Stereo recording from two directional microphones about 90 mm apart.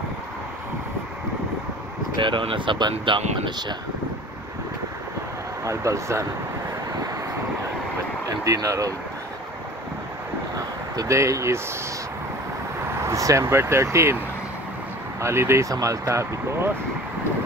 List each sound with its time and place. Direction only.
2.1 s speech: 65° right (ahead or behind)
5.7 s speech: 35° right (ahead or behind)
8.3 s speech: 40° right (ahead or behind)
11.0 s speech: 35° right (ahead or behind)
12.9 s speech: 35° right (ahead or behind)
15.1 s speech: 30° right (ahead or behind)